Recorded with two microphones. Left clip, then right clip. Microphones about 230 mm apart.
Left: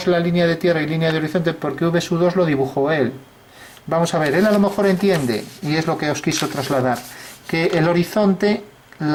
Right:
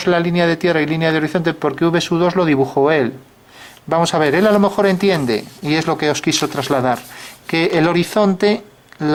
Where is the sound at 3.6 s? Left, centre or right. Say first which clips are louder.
Right 3 dB; centre.